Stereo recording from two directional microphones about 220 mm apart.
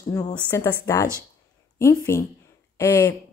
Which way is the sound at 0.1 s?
10° left (ahead or behind).